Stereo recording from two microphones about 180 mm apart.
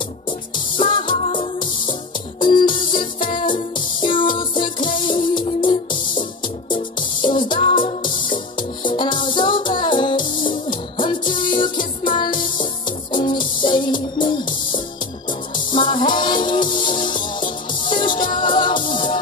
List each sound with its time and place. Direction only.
0.7 s music: 25° left (ahead or behind)
7.2 s music: 25° left (ahead or behind)